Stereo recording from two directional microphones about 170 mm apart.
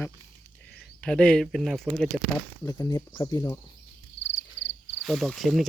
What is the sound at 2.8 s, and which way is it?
Speech, 15° left (ahead or behind).